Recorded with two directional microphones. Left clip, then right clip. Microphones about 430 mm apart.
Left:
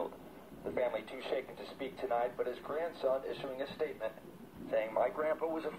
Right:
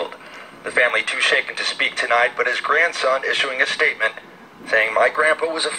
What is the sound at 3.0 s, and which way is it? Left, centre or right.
Speech, centre.